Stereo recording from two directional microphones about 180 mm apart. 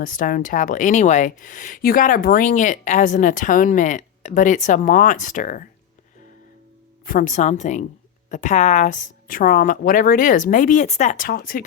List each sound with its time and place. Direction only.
0.0 s a woman's voice: 50° left (ahead or behind)
7.0 s a woman's voice: 50° left (ahead or behind)